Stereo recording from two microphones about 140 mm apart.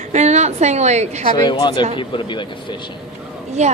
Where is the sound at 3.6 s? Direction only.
55° right (ahead or behind).